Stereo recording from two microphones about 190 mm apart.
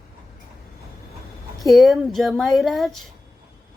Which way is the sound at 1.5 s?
Centre (ahead or behind).